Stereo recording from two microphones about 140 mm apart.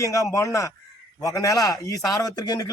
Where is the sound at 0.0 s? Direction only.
25° left (ahead or behind).